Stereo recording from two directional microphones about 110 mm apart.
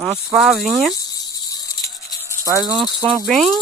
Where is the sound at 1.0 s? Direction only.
40° left (ahead or behind).